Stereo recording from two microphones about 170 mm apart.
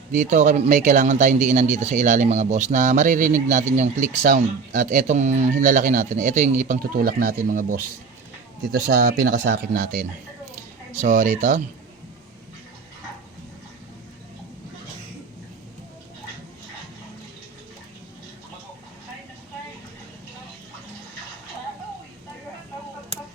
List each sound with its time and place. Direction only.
0.1 s speech: 45° right (ahead or behind)
8.6 s speech: 90° right; by 10.1 s 60° right (ahead or behind)
10.5 s a sound: 50° right (ahead or behind)